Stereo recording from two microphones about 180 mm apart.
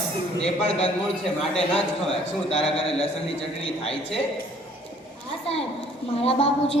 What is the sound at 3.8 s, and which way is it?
Speech, 35° left (ahead or behind).